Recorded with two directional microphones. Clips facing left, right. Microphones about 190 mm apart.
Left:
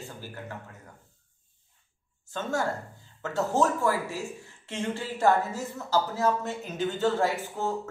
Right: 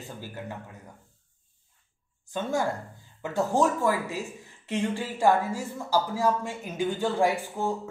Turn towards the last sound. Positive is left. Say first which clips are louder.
# right 2 dB
turn(degrees=-15)  # may be behind; listen again after turning